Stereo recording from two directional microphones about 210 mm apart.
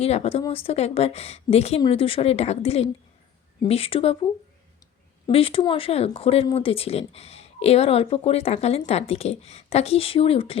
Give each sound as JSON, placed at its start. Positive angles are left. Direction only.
{"t": 0.0, "sound": "speech", "side_deg": 30}
{"t": 5.2, "sound": "speech", "side_deg": 25}